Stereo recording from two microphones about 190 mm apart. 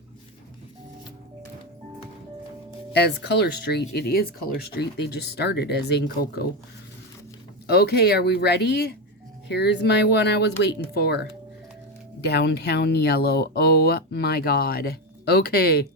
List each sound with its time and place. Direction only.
2.9 s speech: 60° left (ahead or behind)
7.7 s speech: 55° left (ahead or behind)